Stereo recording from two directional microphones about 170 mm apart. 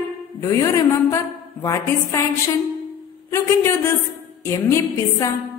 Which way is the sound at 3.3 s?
15° left (ahead or behind).